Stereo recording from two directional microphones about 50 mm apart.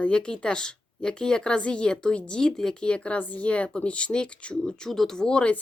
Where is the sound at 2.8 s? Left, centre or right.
Left.